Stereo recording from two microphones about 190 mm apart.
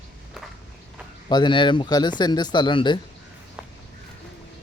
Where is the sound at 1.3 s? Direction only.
25° left (ahead or behind).